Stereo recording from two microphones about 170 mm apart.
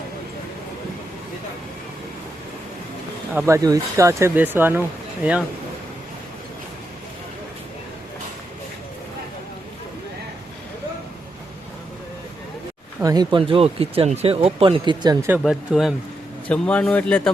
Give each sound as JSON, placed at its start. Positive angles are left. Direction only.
{"t": 3.3, "sound": "speech", "side_deg": -15}
{"t": 13.0, "sound": "speech", "side_deg": -20}
{"t": 15.3, "sound": "speech", "side_deg": 0}